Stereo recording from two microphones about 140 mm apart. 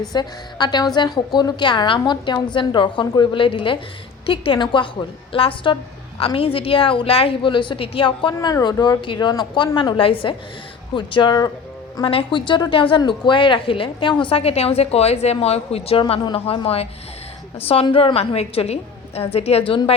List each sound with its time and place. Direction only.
0.1 s a woman's voice: 30° left (ahead or behind)